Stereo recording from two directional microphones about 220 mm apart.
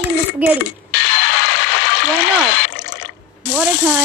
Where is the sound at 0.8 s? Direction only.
50° left (ahead or behind).